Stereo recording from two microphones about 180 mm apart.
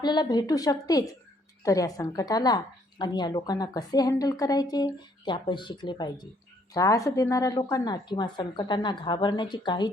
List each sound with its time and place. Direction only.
0.0 s a woman's voice: 25° left (ahead or behind)